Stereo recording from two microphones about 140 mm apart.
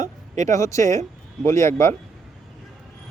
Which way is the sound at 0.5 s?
20° left (ahead or behind).